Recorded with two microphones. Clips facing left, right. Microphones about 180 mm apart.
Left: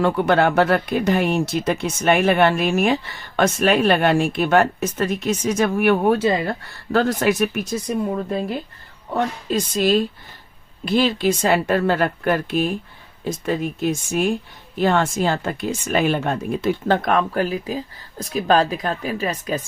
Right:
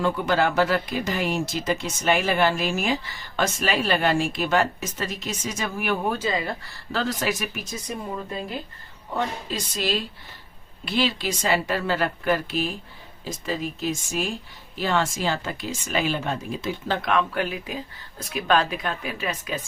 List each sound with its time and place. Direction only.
0.0 s speech: 60° left (ahead or behind)
9.1 s speech: 50° left (ahead or behind)